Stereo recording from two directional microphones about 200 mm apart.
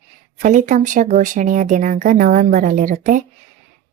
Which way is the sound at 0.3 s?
40° right (ahead or behind).